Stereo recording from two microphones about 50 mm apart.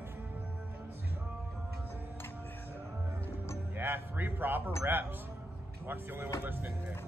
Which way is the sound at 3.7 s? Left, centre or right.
Right.